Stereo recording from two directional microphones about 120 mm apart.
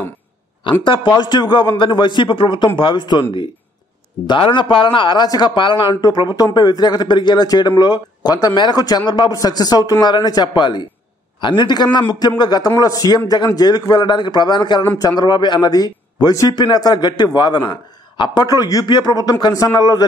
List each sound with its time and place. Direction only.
0.8 s speech: 40° left (ahead or behind)